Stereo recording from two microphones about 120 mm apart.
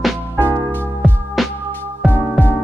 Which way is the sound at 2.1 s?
15° left (ahead or behind).